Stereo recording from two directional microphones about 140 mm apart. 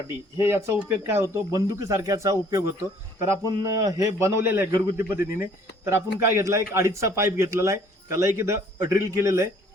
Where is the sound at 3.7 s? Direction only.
25° right (ahead or behind).